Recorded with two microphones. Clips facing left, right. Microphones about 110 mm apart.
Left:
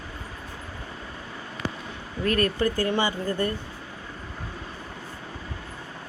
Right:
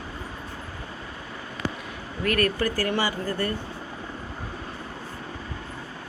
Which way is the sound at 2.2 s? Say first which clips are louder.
Left 1 dB; 25° left (ahead or behind).